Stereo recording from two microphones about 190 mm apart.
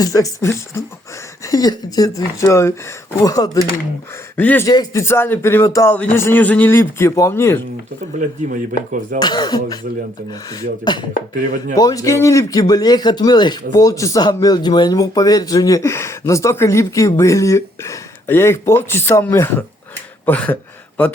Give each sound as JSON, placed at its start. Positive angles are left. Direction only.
{"t": 0.0, "sound": "speech", "side_deg": 20}
{"t": 8.2, "sound": "speech", "side_deg": -45}
{"t": 9.1, "sound": "speech", "side_deg": 20}